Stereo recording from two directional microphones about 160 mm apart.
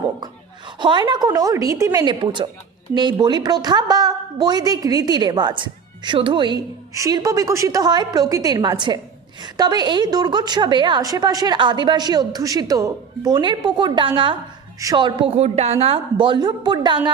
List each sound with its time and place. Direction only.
0.8 s a woman's voice: 30° right (ahead or behind)